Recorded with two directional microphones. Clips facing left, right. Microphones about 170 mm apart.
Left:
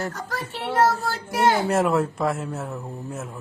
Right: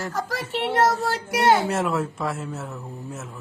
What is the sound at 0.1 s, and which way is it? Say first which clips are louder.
Speech: right 4 dB; 90° right.